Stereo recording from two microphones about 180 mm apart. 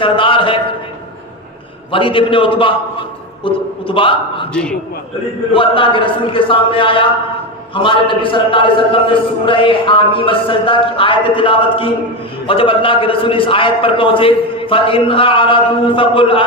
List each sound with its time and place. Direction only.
0.0 s a sound: 30° left (ahead or behind)
1.9 s a man's voice: 30° left (ahead or behind)
4.5 s a man's voice: 5° left (ahead or behind)
5.5 s a man's voice: 30° left (ahead or behind)